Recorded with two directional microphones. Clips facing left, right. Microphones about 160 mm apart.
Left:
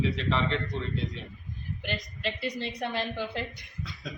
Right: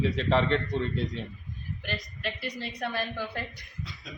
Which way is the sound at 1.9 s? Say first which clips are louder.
Left 2 dB; 20° left (ahead or behind).